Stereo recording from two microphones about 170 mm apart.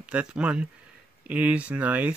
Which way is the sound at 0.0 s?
5° right (ahead or behind).